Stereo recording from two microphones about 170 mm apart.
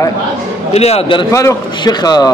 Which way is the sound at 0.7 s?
35° left (ahead or behind).